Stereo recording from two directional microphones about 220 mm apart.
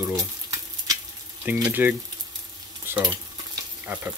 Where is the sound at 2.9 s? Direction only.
10° right (ahead or behind).